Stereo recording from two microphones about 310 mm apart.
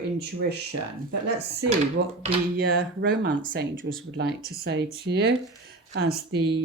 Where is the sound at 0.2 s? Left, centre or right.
Right.